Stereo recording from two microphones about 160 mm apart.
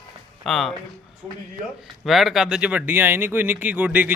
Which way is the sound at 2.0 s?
Centre (ahead or behind).